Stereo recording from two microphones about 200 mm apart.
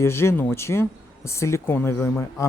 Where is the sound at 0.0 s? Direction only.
15° left (ahead or behind).